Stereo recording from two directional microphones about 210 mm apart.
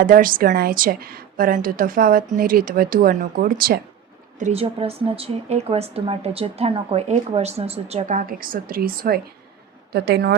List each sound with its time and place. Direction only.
0.0 s speech: 40° right (ahead or behind)
4.4 s a woman's voice: 30° right (ahead or behind); by 10.3 s 50° right (ahead or behind)